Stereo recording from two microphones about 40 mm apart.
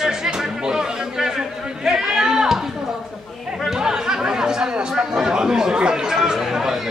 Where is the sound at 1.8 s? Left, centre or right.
Centre.